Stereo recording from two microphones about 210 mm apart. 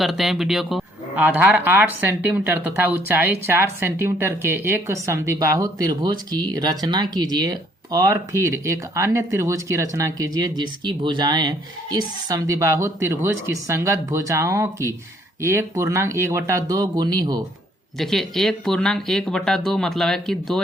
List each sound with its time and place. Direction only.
0.0 s speech: centre (ahead or behind); by 17.4 s 20° right (ahead or behind)
18.0 s speech: centre (ahead or behind)